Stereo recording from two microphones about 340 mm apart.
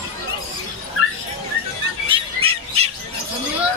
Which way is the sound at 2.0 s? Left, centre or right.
Centre.